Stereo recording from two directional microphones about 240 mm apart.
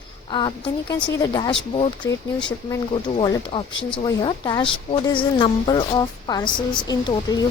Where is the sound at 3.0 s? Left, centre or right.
Centre.